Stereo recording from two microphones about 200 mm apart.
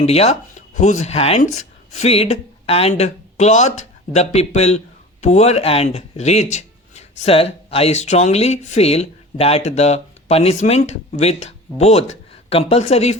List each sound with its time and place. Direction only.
0.0 s speech: 30° left (ahead or behind)